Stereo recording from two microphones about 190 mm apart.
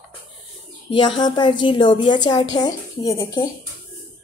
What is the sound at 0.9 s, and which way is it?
A woman's voice, 25° left (ahead or behind).